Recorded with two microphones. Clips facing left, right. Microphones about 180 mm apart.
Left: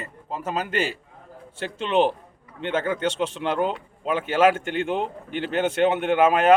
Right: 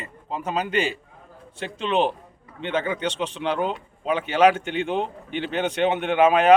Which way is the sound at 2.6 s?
50° left (ahead or behind).